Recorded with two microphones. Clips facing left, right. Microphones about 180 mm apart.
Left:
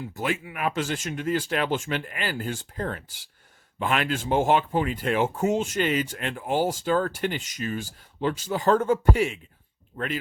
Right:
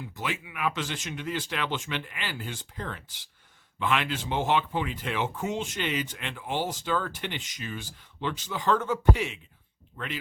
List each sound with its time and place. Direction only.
0.0 s speech: 40° left (ahead or behind)